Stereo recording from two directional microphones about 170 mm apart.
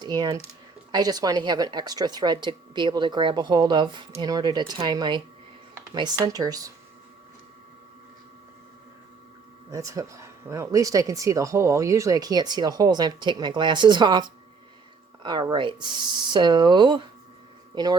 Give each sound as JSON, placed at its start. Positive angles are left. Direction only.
{"t": 0.0, "sound": "speech", "side_deg": -25}
{"t": 9.7, "sound": "speech", "side_deg": -20}